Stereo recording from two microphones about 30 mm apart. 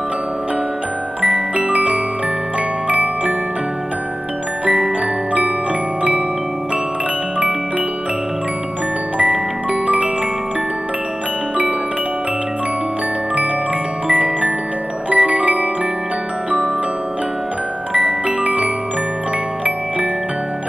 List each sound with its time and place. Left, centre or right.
1.2 s music: right
2.9 s tick-tock: right
9.2 s music: right
14.0 s music: right
17.9 s music: right